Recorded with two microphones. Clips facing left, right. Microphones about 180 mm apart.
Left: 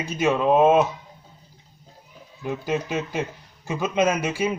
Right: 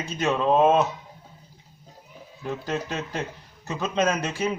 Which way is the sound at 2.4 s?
10° left (ahead or behind).